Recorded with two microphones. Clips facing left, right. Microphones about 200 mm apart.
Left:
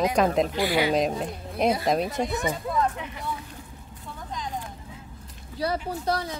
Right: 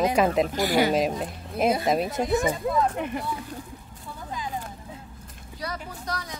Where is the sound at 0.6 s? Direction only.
45° right (ahead or behind).